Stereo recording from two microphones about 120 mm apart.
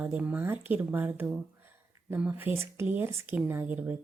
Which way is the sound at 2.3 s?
20° right (ahead or behind).